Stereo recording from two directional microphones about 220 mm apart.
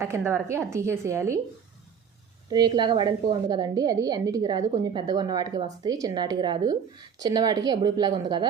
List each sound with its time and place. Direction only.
0.0 s a woman's voice: 10° right (ahead or behind)
2.5 s a woman's voice: 20° right (ahead or behind)